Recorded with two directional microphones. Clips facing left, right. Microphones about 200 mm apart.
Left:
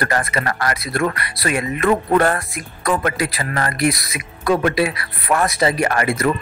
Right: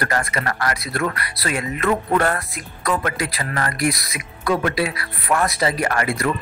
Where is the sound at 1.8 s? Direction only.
30° left (ahead or behind).